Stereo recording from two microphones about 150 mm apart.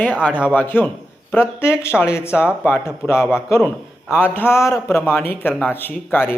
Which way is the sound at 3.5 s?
15° left (ahead or behind).